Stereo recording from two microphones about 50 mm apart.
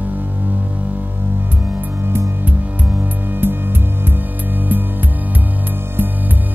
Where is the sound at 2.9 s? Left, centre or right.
Right.